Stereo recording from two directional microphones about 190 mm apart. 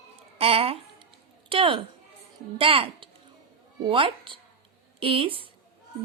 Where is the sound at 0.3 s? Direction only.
30° right (ahead or behind).